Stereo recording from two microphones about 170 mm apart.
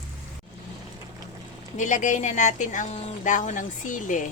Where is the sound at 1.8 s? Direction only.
45° left (ahead or behind).